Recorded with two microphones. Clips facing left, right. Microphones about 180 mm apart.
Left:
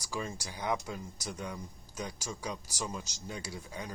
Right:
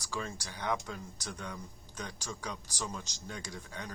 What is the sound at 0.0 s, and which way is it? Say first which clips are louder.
Speech: left 1 dB; 10° left (ahead or behind).